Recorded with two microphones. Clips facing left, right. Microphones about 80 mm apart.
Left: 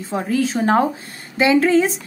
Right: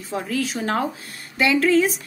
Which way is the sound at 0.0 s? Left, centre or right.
Left.